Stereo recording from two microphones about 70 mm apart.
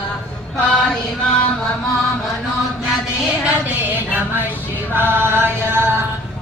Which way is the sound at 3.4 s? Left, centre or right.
Right.